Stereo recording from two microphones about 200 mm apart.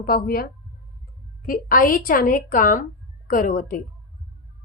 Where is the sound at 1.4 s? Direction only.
45° left (ahead or behind).